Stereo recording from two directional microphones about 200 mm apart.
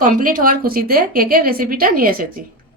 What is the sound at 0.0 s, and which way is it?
A woman's voice, 45° right (ahead or behind).